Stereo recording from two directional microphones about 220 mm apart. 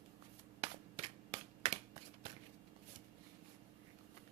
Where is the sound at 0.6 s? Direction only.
25° right (ahead or behind).